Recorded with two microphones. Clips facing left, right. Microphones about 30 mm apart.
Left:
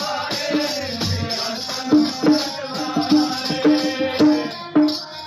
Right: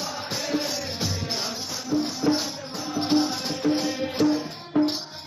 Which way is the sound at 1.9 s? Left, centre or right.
Left.